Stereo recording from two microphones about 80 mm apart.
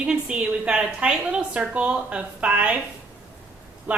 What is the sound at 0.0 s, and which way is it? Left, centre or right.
A woman's voice, centre.